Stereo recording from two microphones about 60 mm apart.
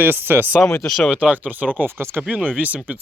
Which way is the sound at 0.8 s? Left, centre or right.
Centre.